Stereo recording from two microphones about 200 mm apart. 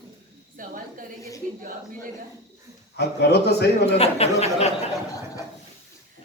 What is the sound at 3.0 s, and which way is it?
Speech, 55° left (ahead or behind).